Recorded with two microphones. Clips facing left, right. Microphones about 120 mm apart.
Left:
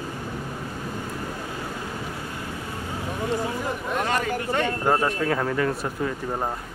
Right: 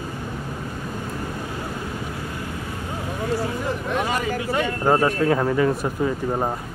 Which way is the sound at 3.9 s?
5° right (ahead or behind).